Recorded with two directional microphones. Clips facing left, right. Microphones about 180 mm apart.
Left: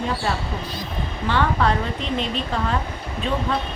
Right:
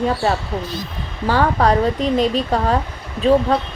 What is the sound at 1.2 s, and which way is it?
Speech, 40° right (ahead or behind).